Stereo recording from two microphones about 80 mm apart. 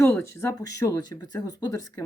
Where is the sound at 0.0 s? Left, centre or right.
Left.